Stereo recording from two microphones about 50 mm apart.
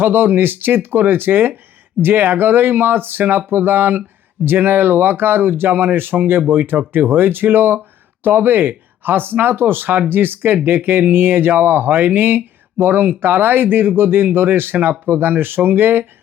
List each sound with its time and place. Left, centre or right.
0.0 s speech: right